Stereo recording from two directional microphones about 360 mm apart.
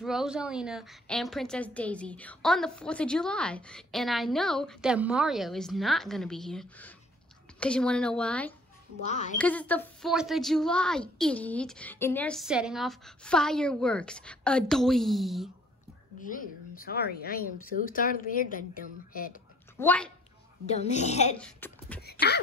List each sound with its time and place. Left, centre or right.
0.0 s a woman's voice: centre
9.0 s speech: centre
9.4 s a woman's voice: centre
16.3 s speech: left
19.8 s a woman's voice: centre
20.6 s a woman's voice: centre
21.4 s a woman's voice: centre
22.2 s speech: left